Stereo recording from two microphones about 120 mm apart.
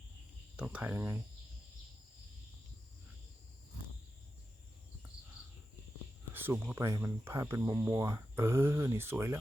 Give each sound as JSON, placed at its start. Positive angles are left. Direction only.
{"t": 0.5, "sound": "speech", "side_deg": -10}
{"t": 6.3, "sound": "speech", "side_deg": -15}